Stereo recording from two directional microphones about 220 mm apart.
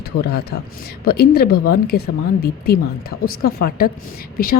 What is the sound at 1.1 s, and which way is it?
Speech, 45° left (ahead or behind).